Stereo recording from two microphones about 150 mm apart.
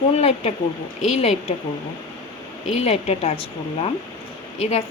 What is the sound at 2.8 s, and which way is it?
Speech, 40° left (ahead or behind).